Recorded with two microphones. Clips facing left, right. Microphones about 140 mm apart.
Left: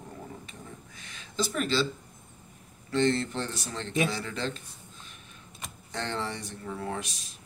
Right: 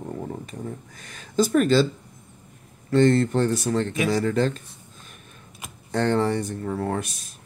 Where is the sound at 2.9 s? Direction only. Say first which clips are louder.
Right 8 dB; 50° right (ahead or behind).